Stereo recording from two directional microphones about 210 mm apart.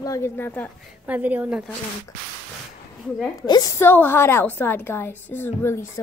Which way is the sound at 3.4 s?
20° left (ahead or behind).